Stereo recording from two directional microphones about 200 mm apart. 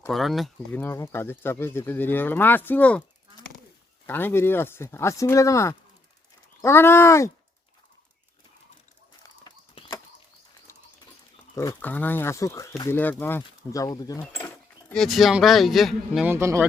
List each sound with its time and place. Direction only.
0.1 s speech: centre (ahead or behind)
4.0 s speech: 10° left (ahead or behind)
9.2 s horse: 20° left (ahead or behind)
10.7 s dog: 15° left (ahead or behind)
11.5 s speech: 15° left (ahead or behind)
14.4 s speech: 5° left (ahead or behind); by 16.6 s 10° right (ahead or behind)